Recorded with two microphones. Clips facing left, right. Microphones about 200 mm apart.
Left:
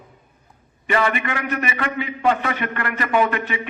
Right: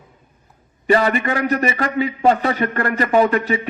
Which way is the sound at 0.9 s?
35° right (ahead or behind).